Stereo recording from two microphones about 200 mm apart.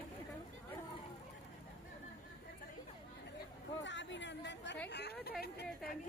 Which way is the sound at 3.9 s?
65° left (ahead or behind).